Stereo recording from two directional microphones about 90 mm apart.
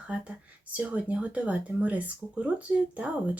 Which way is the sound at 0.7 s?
15° right (ahead or behind).